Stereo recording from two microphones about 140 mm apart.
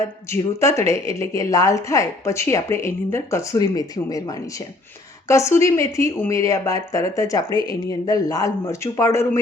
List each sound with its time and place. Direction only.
0.3 s a woman's voice: 20° left (ahead or behind)